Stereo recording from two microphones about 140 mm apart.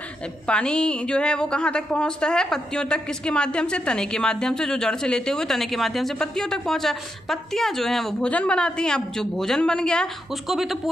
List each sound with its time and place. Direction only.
0.5 s a woman's voice: 5° left (ahead or behind)